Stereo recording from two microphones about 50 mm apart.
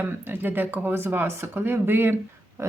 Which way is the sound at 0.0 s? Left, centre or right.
Right.